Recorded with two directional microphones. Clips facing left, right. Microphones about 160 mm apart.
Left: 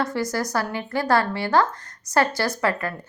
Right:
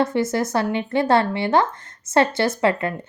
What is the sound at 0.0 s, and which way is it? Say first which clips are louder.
A woman's voice: right 4 dB; 25° right (ahead or behind).